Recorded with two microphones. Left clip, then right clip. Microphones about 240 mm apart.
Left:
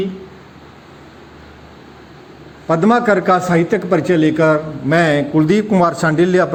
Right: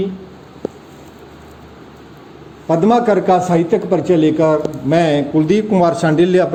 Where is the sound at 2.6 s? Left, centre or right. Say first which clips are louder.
Even; left.